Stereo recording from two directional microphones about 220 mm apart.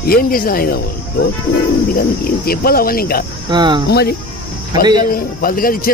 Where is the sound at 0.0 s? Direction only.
40° left (ahead or behind).